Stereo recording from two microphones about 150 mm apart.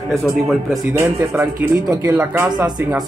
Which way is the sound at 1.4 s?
20° right (ahead or behind).